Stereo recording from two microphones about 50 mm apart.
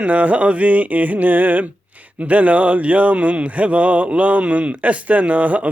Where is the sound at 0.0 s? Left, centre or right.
Right.